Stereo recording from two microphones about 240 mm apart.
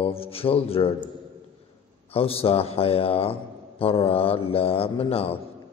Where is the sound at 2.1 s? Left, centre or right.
Left.